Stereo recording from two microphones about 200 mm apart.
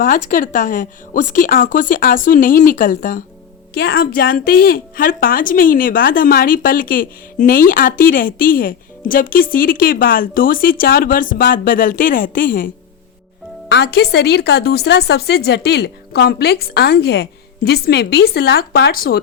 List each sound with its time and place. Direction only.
0.3 s a woman's voice: 45° left (ahead or behind)
13.7 s a woman's voice: 55° left (ahead or behind)